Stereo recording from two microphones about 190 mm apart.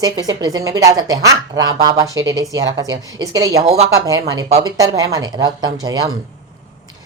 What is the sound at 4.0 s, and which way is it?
Speech, 20° right (ahead or behind).